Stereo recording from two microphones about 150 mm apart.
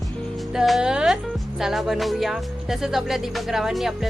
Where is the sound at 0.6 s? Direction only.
Centre (ahead or behind).